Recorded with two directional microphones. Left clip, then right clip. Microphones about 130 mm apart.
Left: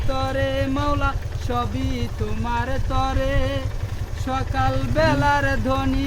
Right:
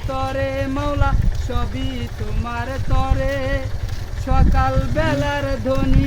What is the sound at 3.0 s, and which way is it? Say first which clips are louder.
Speech: right 1 dB; 10° left (ahead or behind).